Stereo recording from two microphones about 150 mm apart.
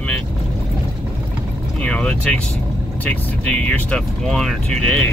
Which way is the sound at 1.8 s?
10° left (ahead or behind).